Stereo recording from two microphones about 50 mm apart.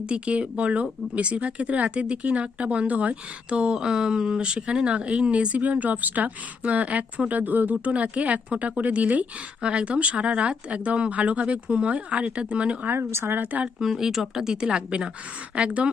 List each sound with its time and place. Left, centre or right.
0.0 s speech: right
9.6 s speech: right
13.1 s a woman's voice: right
13.7 s a woman's voice: centre